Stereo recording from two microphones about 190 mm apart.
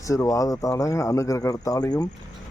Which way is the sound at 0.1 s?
15° left (ahead or behind).